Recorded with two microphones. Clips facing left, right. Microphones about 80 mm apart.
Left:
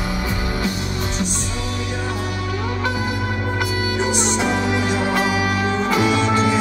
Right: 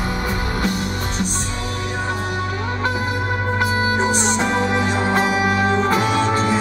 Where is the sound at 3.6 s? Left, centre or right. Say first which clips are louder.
Right 4 dB; right.